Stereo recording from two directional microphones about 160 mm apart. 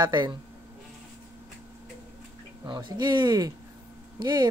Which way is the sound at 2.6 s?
25° right (ahead or behind).